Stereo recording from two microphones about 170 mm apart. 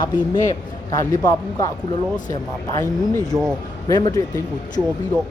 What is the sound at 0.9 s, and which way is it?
Speech, 20° left (ahead or behind).